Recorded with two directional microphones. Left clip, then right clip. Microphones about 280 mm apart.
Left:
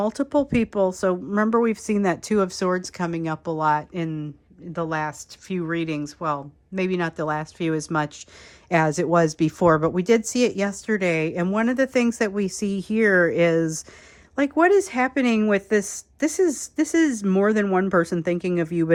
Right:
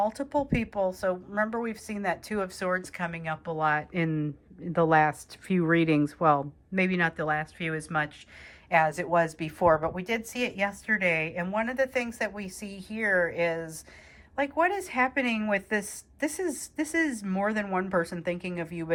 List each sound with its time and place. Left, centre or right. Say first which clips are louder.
0.0 s speech: left 5 dB; centre